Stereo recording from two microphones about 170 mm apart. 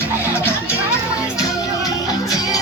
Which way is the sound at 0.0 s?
15° left (ahead or behind).